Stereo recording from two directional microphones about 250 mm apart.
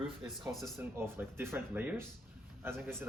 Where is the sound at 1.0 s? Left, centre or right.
Centre.